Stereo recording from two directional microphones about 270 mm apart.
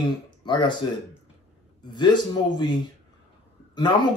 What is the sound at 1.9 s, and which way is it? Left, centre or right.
Speech, centre.